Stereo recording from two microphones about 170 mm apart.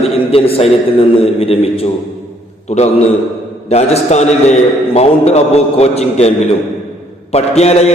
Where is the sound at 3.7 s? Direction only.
40° left (ahead or behind).